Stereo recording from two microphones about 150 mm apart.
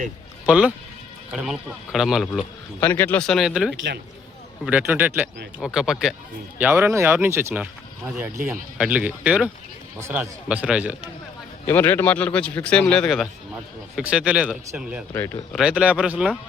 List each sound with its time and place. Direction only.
0.4 s speech: 5° right (ahead or behind)
2.8 s speech: 15° left (ahead or behind); by 6.1 s 5° right (ahead or behind)
6.6 s speech: 15° right (ahead or behind)
11.6 s speech: 15° left (ahead or behind); by 15.0 s 5° right (ahead or behind)
15.1 s speech: 15° left (ahead or behind)
15.5 s speech: 5° right (ahead or behind)